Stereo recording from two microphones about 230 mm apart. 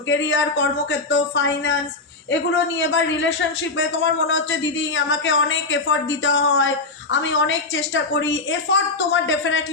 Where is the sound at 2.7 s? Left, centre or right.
Left.